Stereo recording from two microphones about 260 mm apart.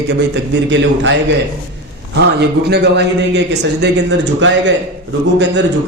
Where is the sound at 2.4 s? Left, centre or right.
Right.